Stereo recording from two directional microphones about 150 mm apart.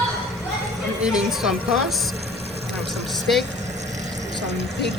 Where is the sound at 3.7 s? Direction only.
50° right (ahead or behind).